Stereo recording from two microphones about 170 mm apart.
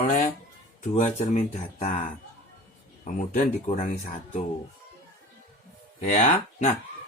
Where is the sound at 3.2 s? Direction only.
45° left (ahead or behind).